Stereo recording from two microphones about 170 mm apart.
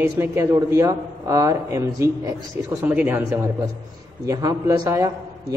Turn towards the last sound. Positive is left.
turn(degrees=-20)  # may be behind; listen again after turning